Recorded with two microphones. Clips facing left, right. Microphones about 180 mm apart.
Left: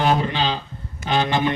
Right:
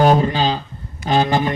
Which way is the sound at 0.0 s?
40° right (ahead or behind).